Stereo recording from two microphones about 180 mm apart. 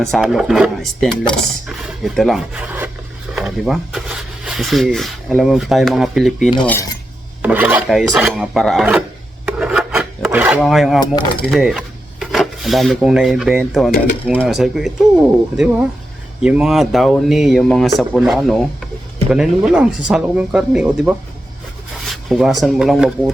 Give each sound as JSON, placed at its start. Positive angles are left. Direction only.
{"t": 0.0, "sound": "speech", "side_deg": 0}
{"t": 9.5, "sound": "filing", "side_deg": -5}
{"t": 10.6, "sound": "speech", "side_deg": 0}
{"t": 11.0, "sound": "speech", "side_deg": 25}
{"t": 11.3, "sound": "dishes", "side_deg": 5}
{"t": 14.3, "sound": "speech", "side_deg": 0}